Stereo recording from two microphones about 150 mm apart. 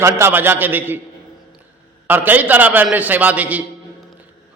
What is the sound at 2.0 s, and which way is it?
A man's voice, 10° right (ahead or behind).